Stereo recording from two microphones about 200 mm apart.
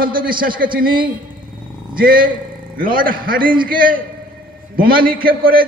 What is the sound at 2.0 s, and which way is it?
A man's voice, 45° right (ahead or behind).